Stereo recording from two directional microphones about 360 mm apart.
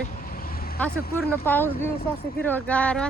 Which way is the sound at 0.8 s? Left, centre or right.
Centre.